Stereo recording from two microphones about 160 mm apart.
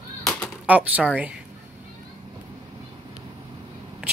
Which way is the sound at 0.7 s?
10° right (ahead or behind).